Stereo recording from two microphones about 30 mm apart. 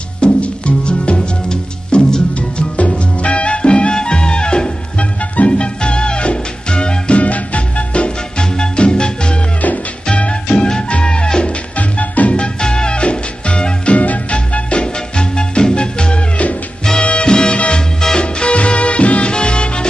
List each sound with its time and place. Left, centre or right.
0.2 s music: left
3.2 s music: left
5.3 s music: left
5.6 s music: left
7.2 s music: left
8.4 s music: left
11.7 s music: left
12.5 s music: left
13.9 s music: left
17.3 s music: left
17.6 s music: left